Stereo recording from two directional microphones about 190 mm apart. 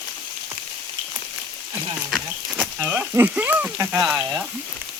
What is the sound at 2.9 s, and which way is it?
Speech, 10° right (ahead or behind).